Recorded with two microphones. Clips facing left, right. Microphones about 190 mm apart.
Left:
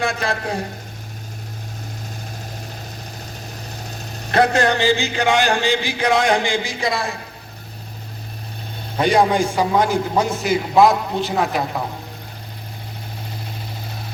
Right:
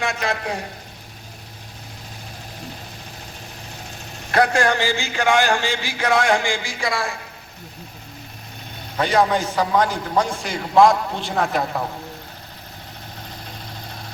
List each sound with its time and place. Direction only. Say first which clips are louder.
0.0 s a man's voice: left 2 dB; 35° left (ahead or behind)
4.3 s a sound: left 2 dB; 20° left (ahead or behind)
9.0 s a man's voice: left 3 dB; 15° left (ahead or behind)